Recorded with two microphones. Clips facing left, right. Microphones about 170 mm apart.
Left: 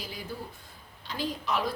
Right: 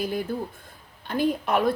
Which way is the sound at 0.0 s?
55° right (ahead or behind).